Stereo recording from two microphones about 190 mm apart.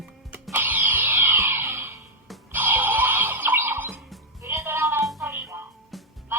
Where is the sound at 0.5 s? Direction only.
10° right (ahead or behind).